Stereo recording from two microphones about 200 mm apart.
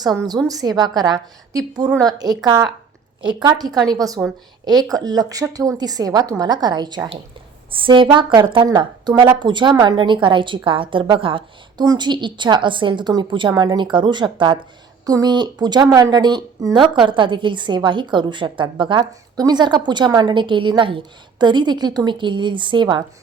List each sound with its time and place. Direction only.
0.3 s a woman's voice: 20° right (ahead or behind)